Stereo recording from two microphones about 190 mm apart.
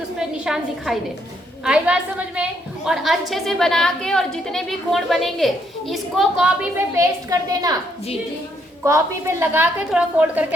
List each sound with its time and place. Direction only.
0.2 s a woman's voice: 5° right (ahead or behind); by 7.8 s 20° right (ahead or behind)
8.8 s a woman's voice: 15° right (ahead or behind)